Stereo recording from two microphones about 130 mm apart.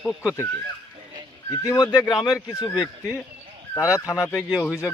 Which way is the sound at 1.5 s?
30° left (ahead or behind).